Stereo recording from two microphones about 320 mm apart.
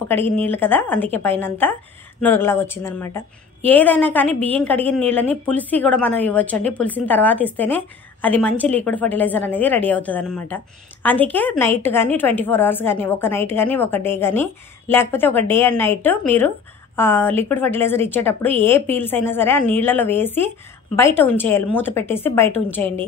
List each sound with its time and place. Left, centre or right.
0.1 s a woman's voice: centre